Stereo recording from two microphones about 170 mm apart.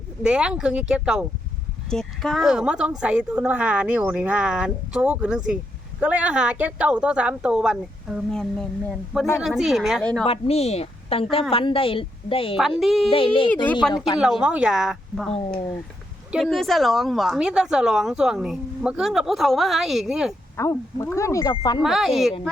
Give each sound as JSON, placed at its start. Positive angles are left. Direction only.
{"t": 0.2, "sound": "a woman's voice", "side_deg": -5}
{"t": 10.2, "sound": "a woman's voice", "side_deg": 35}
{"t": 12.8, "sound": "a woman's voice", "side_deg": 0}
{"t": 13.1, "sound": "a woman's voice", "side_deg": 30}
{"t": 13.8, "sound": "a woman's voice", "side_deg": 5}
{"t": 16.3, "sound": "a woman's voice", "side_deg": 0}
{"t": 20.6, "sound": "speech", "side_deg": 15}
{"t": 21.8, "sound": "a woman's voice", "side_deg": 0}